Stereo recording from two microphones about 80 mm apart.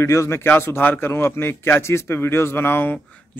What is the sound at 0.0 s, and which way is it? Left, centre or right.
A man's voice, left.